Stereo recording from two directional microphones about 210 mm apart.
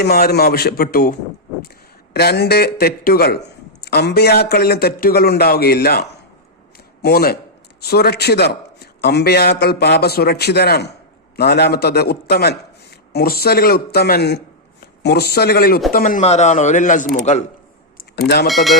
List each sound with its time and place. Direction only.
0.0 s a man's voice: 50° left (ahead or behind)
2.1 s a man's voice: 50° left (ahead or behind)
6.7 s a sound: 45° left (ahead or behind)
7.8 s a man's voice: 50° left (ahead or behind); by 17.4 s 30° left (ahead or behind)
18.4 s speech: centre (ahead or behind)